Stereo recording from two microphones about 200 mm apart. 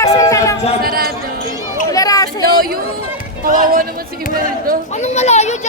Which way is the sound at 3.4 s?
45° right (ahead or behind).